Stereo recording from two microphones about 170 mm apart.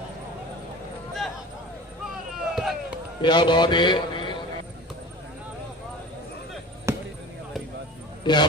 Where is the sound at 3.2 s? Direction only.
25° left (ahead or behind).